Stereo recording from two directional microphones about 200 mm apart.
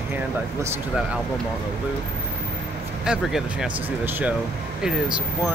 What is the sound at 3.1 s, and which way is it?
Speech, 5° right (ahead or behind).